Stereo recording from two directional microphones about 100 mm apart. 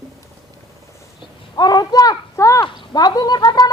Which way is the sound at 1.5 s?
45° left (ahead or behind).